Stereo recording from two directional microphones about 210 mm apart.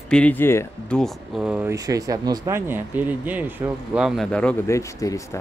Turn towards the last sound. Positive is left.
turn(degrees=15)  # may be behind; listen again after turning